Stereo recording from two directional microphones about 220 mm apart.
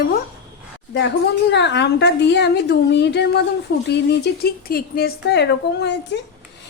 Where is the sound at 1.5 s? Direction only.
50° left (ahead or behind).